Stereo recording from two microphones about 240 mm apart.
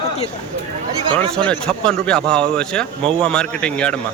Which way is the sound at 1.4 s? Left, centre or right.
Centre.